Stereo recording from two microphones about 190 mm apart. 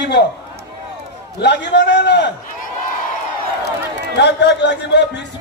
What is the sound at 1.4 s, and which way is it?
Speech, 65° left (ahead or behind).